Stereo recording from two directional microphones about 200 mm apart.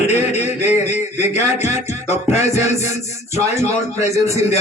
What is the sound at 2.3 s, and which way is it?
A man's voice, 35° left (ahead or behind).